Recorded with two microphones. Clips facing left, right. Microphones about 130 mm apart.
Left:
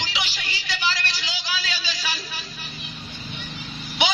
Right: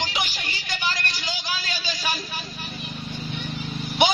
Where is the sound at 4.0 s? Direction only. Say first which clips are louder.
Right 4 dB; 50° right (ahead or behind).